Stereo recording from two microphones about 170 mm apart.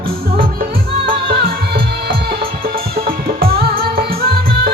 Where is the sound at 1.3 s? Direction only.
65° right (ahead or behind).